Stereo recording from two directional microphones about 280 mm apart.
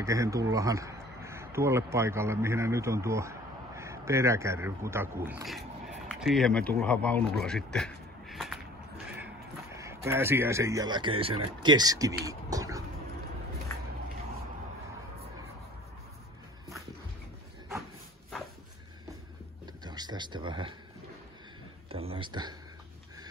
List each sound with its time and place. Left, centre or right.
0.0 s speech: centre
19.6 s a sound: centre
21.9 s speech: centre